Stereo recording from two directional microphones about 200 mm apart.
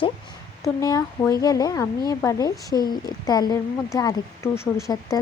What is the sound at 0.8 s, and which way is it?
A woman's voice, 15° left (ahead or behind).